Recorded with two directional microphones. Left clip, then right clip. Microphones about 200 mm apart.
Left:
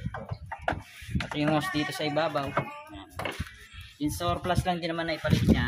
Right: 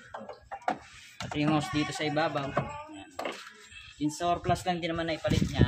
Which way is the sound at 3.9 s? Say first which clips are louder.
Right 1 dB; 20° left (ahead or behind).